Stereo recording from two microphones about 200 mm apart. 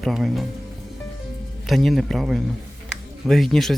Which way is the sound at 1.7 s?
Centre (ahead or behind).